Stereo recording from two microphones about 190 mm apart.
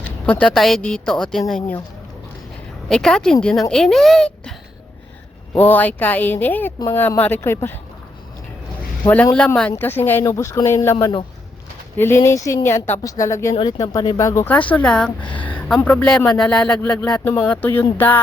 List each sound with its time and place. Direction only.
0.3 s speech: 5° left (ahead or behind)
2.9 s speech: 5° left (ahead or behind)
5.5 s speech: 10° left (ahead or behind)
9.0 s speech: 10° left (ahead or behind)
11.0 s speech: 25° left (ahead or behind)
11.9 s speech: 15° left (ahead or behind)